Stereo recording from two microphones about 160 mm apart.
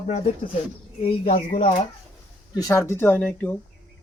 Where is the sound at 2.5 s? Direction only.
20° left (ahead or behind).